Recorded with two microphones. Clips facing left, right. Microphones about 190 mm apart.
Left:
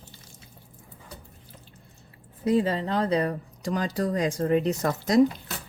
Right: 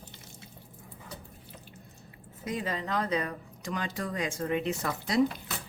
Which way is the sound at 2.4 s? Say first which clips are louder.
Left 10 dB; 30° left (ahead or behind).